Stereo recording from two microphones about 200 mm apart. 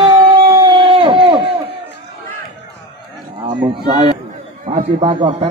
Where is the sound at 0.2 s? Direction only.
25° right (ahead or behind).